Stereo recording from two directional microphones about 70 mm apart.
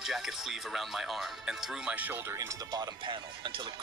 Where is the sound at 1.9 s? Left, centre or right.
Right.